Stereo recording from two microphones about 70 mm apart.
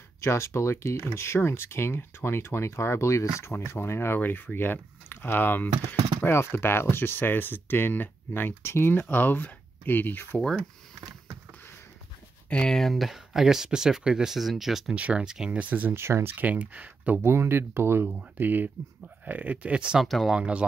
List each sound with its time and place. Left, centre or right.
0.2 s speech: left
4.2 s speech: left
12.4 s speech: centre
12.7 s speech: centre
15.0 s speech: centre
15.9 s speech: right
16.3 s speech: right
17.2 s speech: right; by 20.0 s centre
20.0 s speech: centre
20.3 s speech: centre